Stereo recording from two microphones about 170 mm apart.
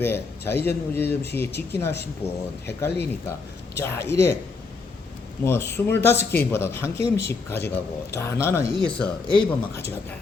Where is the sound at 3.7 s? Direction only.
15° left (ahead or behind).